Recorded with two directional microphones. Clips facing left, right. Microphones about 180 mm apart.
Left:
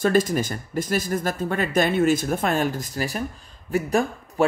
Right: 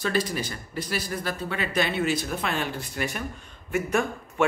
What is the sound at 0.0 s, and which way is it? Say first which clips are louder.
Speech: left 7 dB; 45° left (ahead or behind).